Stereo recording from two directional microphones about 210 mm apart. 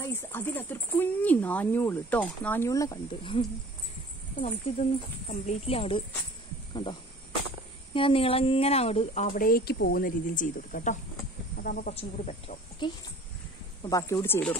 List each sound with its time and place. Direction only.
0.0 s speech: 10° left (ahead or behind); by 11.9 s 45° left (ahead or behind)
11.9 s speech: 30° left (ahead or behind)
13.8 s speech: 15° left (ahead or behind)